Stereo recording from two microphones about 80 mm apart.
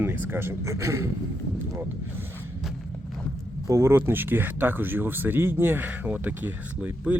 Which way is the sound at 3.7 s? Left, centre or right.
Right.